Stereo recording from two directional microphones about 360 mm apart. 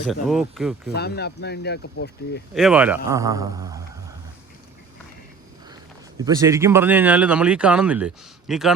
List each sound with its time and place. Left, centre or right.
0.0 s speech: centre
0.9 s speech: left
2.6 s a man's voice: centre
6.1 s speech: centre